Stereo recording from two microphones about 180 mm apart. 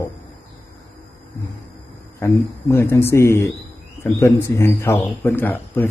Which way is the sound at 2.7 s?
15° left (ahead or behind).